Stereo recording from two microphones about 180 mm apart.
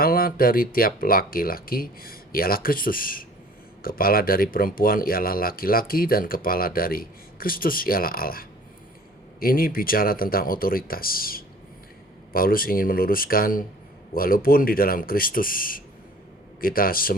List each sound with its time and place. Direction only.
0.0 s speech: 55° left (ahead or behind)